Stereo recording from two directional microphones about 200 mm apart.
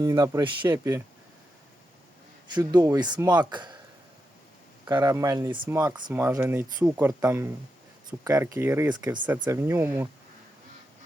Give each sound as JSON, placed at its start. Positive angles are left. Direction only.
{"t": 0.0, "sound": "speech", "side_deg": -15}
{"t": 2.7, "sound": "speech", "side_deg": -20}
{"t": 4.9, "sound": "speech", "side_deg": -15}
{"t": 5.6, "sound": "speech", "side_deg": -10}